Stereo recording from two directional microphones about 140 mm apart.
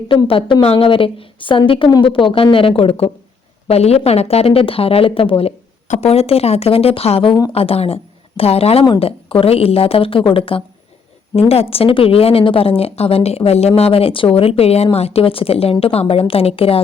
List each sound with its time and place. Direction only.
0.1 s a woman's voice: 40° left (ahead or behind)